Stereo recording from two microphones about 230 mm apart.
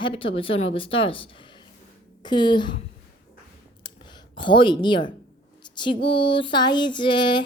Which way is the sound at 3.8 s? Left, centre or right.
Centre.